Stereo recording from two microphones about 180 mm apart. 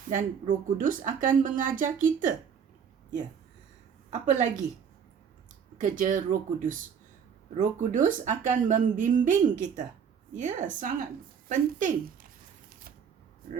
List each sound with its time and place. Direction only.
0.1 s speech: 45° right (ahead or behind)
4.1 s speech: 40° right (ahead or behind)
5.7 s speech: 45° right (ahead or behind)